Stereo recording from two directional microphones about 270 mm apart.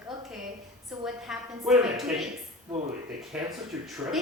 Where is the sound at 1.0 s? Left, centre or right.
Centre.